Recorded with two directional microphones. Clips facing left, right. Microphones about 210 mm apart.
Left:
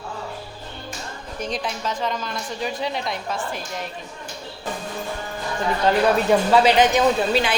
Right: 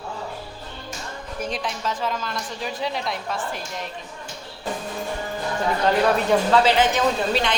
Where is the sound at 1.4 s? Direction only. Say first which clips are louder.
Left 1 dB; 5° right (ahead or behind).